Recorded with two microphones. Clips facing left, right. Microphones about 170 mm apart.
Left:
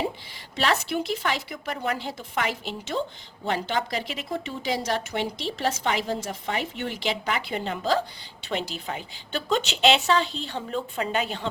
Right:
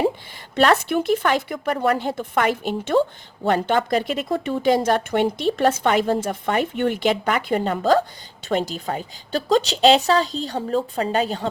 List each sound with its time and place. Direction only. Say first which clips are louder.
0.5 s a woman's voice: right 7 dB; 55° right (ahead or behind); by 11.4 s 35° right (ahead or behind)